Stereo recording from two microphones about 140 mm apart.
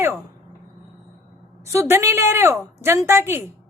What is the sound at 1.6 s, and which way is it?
A woman's voice, 20° right (ahead or behind).